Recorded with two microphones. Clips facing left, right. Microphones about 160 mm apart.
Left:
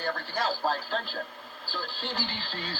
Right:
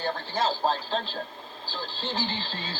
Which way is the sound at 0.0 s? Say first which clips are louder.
Right 3 dB; 25° right (ahead or behind).